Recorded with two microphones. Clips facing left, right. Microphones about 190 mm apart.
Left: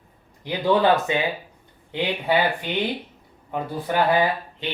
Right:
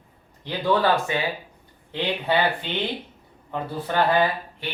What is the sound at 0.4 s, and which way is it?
Speech, 15° left (ahead or behind).